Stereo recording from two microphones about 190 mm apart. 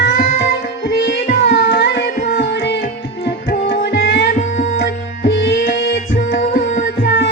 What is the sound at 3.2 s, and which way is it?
Music, 60° left (ahead or behind).